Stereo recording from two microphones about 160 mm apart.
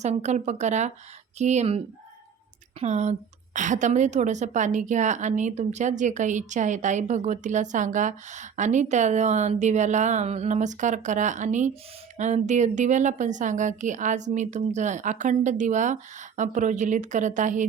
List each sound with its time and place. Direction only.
0.0 s a woman's voice: 45° right (ahead or behind)
2.8 s a woman's voice: 45° right (ahead or behind)